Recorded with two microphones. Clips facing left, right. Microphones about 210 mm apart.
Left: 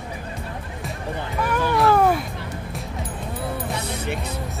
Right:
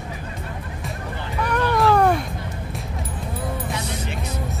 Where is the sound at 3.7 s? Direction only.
60° left (ahead or behind).